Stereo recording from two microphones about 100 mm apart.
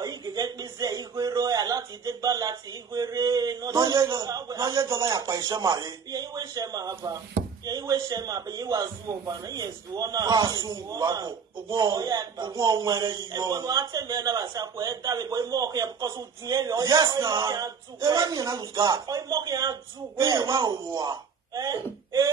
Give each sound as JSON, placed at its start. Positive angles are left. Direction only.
{"t": 0.0, "sound": "a man's voice", "side_deg": -40}